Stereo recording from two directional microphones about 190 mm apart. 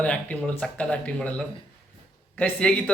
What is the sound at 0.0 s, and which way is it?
A man's voice, 5° left (ahead or behind).